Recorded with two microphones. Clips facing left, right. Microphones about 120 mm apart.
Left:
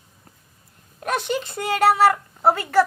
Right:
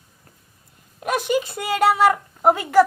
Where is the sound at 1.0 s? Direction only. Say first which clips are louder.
Right 3 dB; 5° right (ahead or behind).